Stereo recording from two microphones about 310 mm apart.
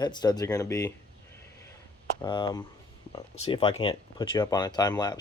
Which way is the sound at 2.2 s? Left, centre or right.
Centre.